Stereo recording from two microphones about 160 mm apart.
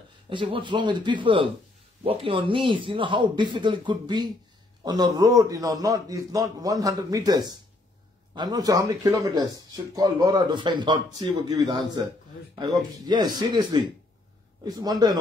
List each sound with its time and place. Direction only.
0.3 s a man's voice: 30° right (ahead or behind)